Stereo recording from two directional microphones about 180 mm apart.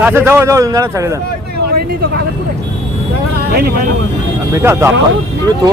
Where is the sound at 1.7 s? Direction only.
60° right (ahead or behind).